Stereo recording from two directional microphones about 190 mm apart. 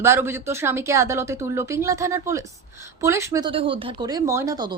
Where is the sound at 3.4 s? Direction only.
30° right (ahead or behind).